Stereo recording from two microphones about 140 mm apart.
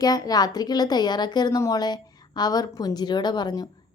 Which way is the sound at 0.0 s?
30° left (ahead or behind).